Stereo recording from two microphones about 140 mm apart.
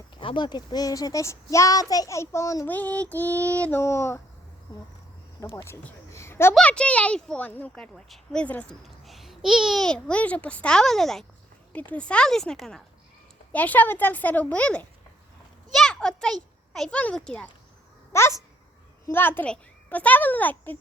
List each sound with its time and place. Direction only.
0.2 s a child's voice: 35° left (ahead or behind); by 4.2 s 20° left (ahead or behind)
5.6 s speech: 20° left (ahead or behind)
6.5 s a child's voice: 5° left (ahead or behind)
18.1 s a child's voice: 20° left (ahead or behind)